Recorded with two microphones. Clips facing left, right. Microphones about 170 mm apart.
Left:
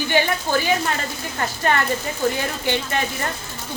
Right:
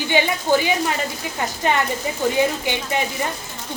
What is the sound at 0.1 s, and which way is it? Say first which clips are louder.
Speech: right 3 dB; 15° right (ahead or behind).